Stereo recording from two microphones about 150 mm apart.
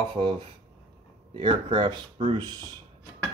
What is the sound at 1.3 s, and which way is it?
Speech, 35° right (ahead or behind).